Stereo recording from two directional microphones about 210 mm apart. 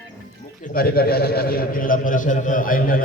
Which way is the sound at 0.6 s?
45° left (ahead or behind).